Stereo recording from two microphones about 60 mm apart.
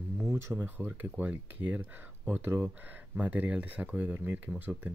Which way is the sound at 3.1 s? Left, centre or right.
Right.